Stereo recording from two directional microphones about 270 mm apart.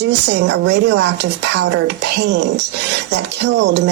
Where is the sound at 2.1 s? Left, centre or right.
Right.